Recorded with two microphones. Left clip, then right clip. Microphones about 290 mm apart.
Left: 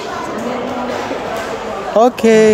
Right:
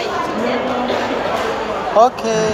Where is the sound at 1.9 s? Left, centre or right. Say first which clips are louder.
Left 3 dB; left.